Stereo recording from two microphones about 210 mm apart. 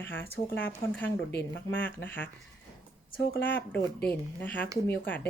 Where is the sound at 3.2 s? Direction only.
60° left (ahead or behind).